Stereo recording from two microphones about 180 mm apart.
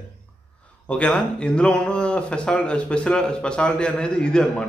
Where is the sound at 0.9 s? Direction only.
5° left (ahead or behind).